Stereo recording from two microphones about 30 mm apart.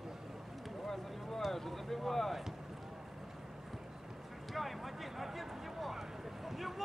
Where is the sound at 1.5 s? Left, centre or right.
Centre.